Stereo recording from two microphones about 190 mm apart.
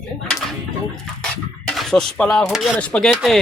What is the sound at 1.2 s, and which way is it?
Music, centre (ahead or behind).